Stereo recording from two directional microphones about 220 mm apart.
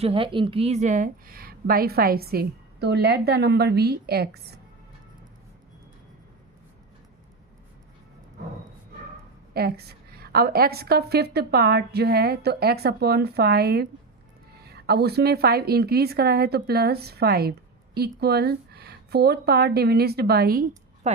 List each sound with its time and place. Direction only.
0.0 s a woman's voice: 25° right (ahead or behind); by 4.6 s 45° right (ahead or behind)
9.6 s a woman's voice: 45° right (ahead or behind)